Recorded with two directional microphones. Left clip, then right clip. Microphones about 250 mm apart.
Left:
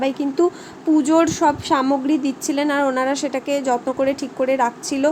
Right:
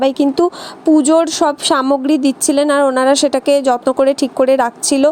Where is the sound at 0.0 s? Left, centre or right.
Right.